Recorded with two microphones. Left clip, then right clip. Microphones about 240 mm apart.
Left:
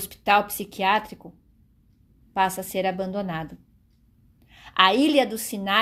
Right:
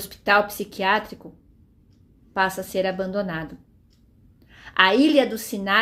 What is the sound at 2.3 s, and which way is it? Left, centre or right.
A woman's voice, left.